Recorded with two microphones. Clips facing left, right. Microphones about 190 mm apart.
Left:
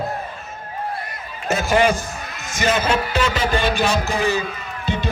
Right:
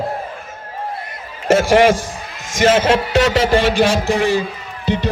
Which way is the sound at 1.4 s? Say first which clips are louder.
Right 6 dB; 90° right.